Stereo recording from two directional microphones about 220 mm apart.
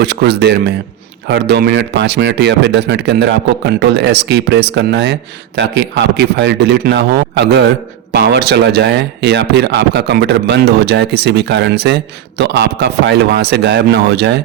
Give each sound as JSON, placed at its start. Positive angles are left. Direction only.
{"t": 0.0, "sound": "speech", "side_deg": -50}